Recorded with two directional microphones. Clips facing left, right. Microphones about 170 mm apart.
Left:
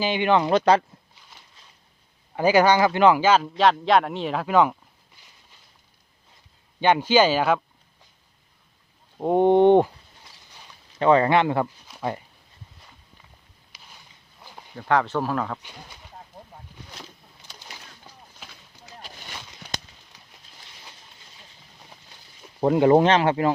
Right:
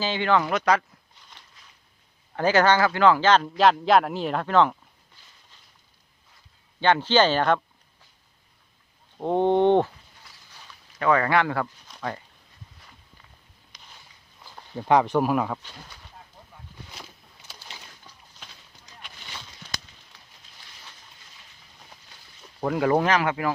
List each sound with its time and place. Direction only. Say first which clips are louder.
0.0 s speech: left 2 dB; 15° left (ahead or behind)
2.3 s a man's voice: left 2 dB; 10° left (ahead or behind)
6.7 s a man's voice: left 2 dB; 15° left (ahead or behind)
9.1 s a man's voice: left 4 dB; 10° left (ahead or behind)
10.5 s a sound: even; 20° left (ahead or behind)
13.7 s a sound: left 1 dB; 5° left (ahead or behind)
14.8 s speech: right 2 dB; 15° right (ahead or behind)
18.4 s run: left 2 dB; 5° left (ahead or behind)
19.6 s a sound: left 4 dB; 65° left (ahead or behind)
22.6 s speech: left 6 dB; 25° left (ahead or behind)